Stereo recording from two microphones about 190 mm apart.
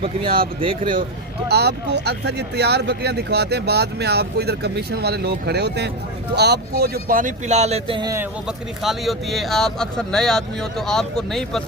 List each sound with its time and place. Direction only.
0.0 s speech: 30° right (ahead or behind)
1.5 s speech: 60° right (ahead or behind); by 8.1 s 25° right (ahead or behind)
8.1 s speech: 5° right (ahead or behind)